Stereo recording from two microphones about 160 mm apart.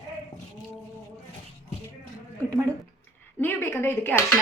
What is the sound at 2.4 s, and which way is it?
Speech, 20° right (ahead or behind).